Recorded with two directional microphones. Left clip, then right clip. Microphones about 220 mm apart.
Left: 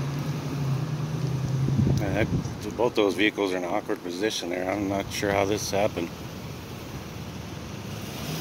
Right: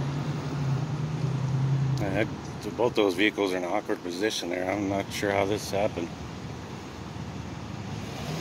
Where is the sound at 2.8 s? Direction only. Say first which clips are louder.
Left 1 dB; 10° left (ahead or behind).